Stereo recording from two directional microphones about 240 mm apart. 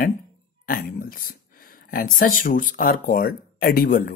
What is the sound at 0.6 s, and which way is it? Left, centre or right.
Speech, left.